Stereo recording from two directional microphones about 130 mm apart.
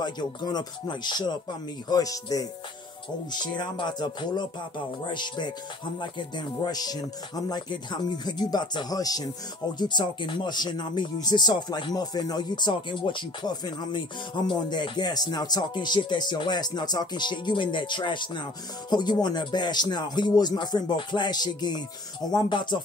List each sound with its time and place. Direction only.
0.0 s speech: 35° left (ahead or behind)